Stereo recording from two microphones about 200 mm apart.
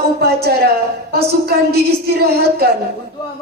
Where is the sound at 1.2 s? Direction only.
55° right (ahead or behind).